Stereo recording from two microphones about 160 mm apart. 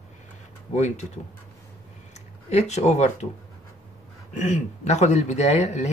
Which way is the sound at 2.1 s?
45° left (ahead or behind).